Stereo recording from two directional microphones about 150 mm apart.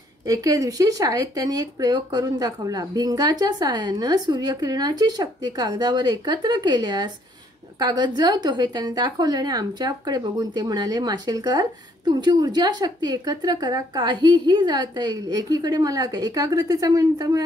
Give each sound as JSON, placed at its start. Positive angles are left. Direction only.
{"t": 0.3, "sound": "a woman's voice", "side_deg": -25}